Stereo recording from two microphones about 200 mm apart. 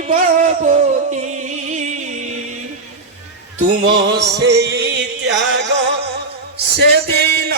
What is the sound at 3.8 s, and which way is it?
Music, 25° right (ahead or behind).